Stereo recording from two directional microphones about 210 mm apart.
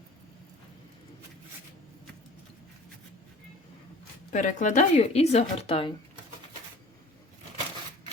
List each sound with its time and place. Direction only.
4.3 s speech: 35° left (ahead or behind)